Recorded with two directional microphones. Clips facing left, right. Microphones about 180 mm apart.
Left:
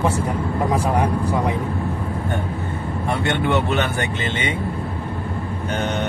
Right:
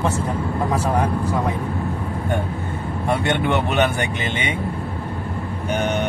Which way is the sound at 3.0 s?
15° right (ahead or behind).